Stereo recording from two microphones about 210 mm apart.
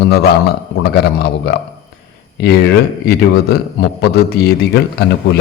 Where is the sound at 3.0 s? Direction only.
50° left (ahead or behind).